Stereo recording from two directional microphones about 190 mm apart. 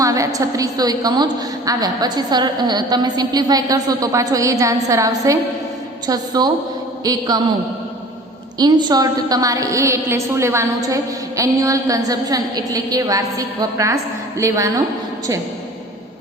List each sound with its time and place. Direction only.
0.0 s a woman's voice: 20° right (ahead or behind)
8.5 s a woman's voice: 20° right (ahead or behind)